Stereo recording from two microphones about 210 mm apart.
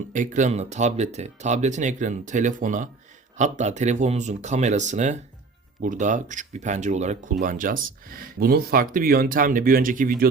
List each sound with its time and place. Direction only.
0.1 s speech: 35° right (ahead or behind)